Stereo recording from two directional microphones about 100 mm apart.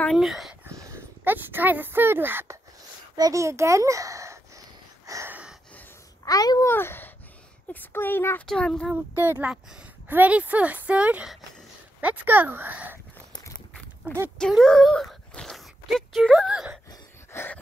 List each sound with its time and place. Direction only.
0.0 s speech: centre (ahead or behind)
0.7 s a child's voice: 25° right (ahead or behind)
5.0 s a sound: 30° right (ahead or behind)
5.3 s gasp: 10° right (ahead or behind)
6.2 s a child's voice: 40° left (ahead or behind)
6.7 s a woman's voice: 20° left (ahead or behind)
8.5 s speech: 5° left (ahead or behind)
8.9 s speech: 20° right (ahead or behind)
9.5 s speech: 10° right (ahead or behind)
14.0 s speech: 15° right (ahead or behind)
14.5 s speech: 5° left (ahead or behind)
17.3 s a sound: 25° left (ahead or behind)